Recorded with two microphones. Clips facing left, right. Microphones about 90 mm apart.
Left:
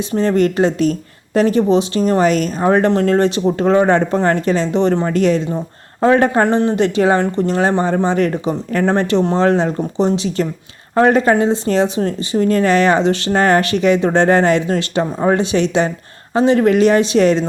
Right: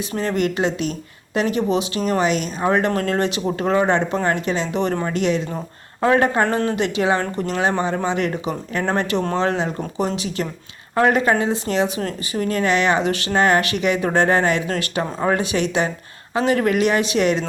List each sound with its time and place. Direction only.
0.1 s speech: 35° left (ahead or behind)